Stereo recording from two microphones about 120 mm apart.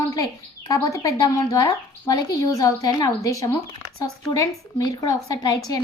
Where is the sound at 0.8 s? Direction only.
30° left (ahead or behind).